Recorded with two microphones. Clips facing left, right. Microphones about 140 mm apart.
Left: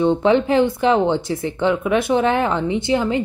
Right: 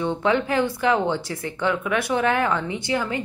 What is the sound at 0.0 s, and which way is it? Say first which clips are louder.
Speech: left 6 dB; 25° left (ahead or behind).